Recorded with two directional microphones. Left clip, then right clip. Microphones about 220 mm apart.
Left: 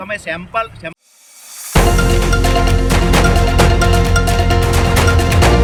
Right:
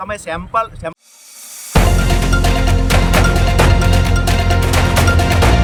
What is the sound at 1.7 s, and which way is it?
Music, centre (ahead or behind).